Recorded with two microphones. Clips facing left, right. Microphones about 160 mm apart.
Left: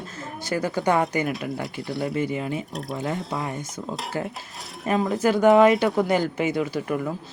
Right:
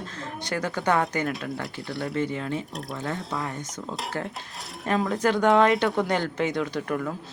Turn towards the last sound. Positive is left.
turn(degrees=5)  # may be behind; listen again after turning